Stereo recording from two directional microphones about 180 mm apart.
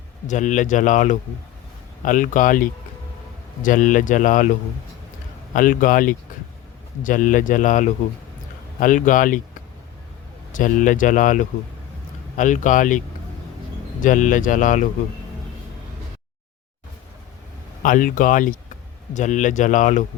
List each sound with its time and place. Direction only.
0.3 s speech: 45° left (ahead or behind)
5.5 s speech: 50° left (ahead or behind)
10.5 s speech: 45° left (ahead or behind)
14.0 s speech: 45° left (ahead or behind)
17.8 s speech: 45° left (ahead or behind)